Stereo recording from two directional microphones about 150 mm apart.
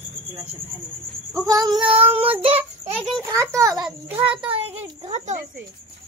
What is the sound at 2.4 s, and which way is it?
Child singing, 45° right (ahead or behind).